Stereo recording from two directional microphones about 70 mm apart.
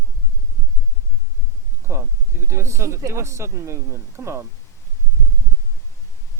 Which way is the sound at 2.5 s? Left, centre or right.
Right.